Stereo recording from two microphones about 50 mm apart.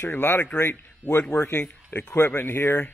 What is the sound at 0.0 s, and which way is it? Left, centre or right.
Speech, left.